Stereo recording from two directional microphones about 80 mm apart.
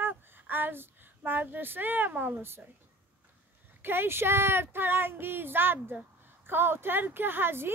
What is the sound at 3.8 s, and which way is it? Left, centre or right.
A woman's voice, right.